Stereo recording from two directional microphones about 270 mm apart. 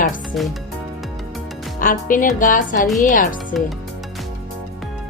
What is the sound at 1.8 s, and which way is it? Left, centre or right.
A woman's voice, left.